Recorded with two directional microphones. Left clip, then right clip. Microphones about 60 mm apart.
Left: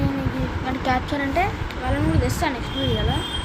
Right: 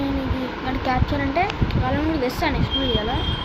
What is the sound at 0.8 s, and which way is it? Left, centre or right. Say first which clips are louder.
Speech: left 1 dB; left.